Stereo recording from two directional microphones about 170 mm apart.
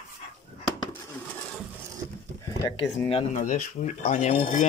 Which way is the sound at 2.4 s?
20° left (ahead or behind).